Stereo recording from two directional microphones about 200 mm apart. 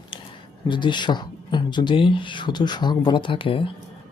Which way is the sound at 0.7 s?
25° left (ahead or behind).